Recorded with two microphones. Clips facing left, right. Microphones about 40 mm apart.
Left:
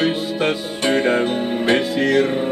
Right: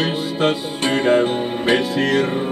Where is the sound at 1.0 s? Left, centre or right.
Centre.